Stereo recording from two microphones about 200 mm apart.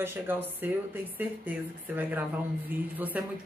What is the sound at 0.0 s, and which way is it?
A woman's voice, 10° right (ahead or behind).